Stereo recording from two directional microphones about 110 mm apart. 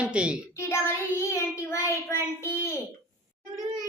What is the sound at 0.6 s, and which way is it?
Child singing, 25° left (ahead or behind).